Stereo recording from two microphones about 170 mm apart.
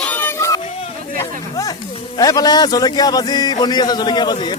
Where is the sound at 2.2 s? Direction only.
20° left (ahead or behind).